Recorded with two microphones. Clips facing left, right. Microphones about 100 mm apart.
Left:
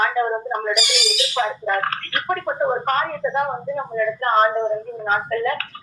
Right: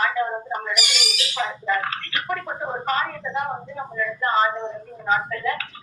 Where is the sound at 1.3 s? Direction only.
50° left (ahead or behind).